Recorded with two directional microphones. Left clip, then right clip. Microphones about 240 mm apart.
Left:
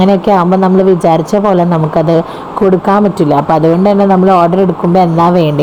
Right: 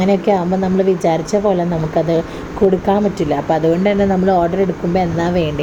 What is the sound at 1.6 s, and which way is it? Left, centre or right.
Speech, left.